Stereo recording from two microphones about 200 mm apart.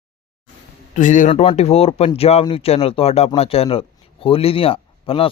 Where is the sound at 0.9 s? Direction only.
40° left (ahead or behind).